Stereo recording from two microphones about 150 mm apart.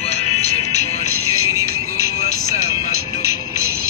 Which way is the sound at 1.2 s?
20° right (ahead or behind).